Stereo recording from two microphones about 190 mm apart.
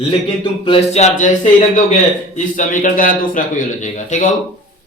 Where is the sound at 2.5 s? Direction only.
45° left (ahead or behind).